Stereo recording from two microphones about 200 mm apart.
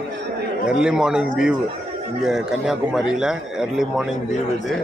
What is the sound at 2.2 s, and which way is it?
Speech, centre (ahead or behind).